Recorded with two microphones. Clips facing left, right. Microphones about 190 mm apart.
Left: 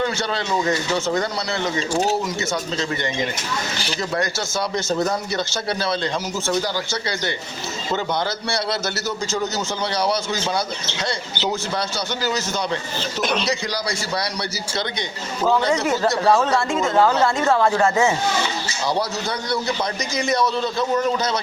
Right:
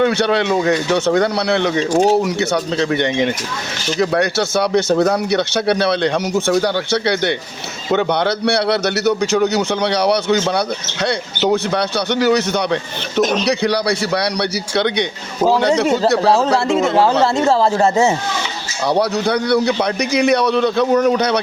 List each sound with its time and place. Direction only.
0.0 s speech: 65° right (ahead or behind)
16.9 s speech: 30° right (ahead or behind)
18.9 s speech: 65° right (ahead or behind)